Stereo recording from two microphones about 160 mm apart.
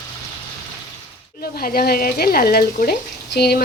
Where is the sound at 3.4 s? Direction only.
90° left.